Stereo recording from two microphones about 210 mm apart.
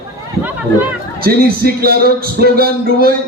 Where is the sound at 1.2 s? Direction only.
45° right (ahead or behind).